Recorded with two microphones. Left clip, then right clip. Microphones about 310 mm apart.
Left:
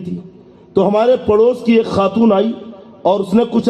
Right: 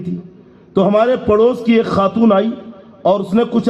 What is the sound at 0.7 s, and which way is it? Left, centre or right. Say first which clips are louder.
A man's voice: left 1 dB; right.